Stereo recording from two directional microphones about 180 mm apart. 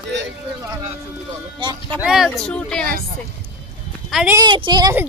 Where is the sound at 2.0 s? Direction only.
Centre (ahead or behind).